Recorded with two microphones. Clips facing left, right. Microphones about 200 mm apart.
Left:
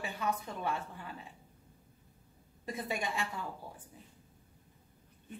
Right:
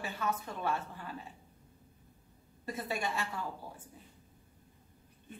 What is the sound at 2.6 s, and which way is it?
Speech, 15° left (ahead or behind).